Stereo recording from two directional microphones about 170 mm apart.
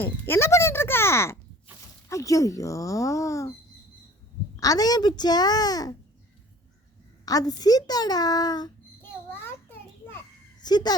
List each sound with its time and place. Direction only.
0.0 s a child's voice: 15° left (ahead or behind)
4.6 s speech: 20° left (ahead or behind)
7.3 s speech: 20° left (ahead or behind)
9.0 s a sound: 10° left (ahead or behind)
10.6 s speech: 25° left (ahead or behind)